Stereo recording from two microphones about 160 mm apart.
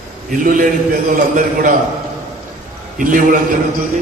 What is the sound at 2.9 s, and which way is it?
Speech, 60° right (ahead or behind).